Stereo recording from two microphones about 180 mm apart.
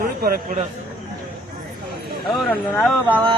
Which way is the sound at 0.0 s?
55° right (ahead or behind).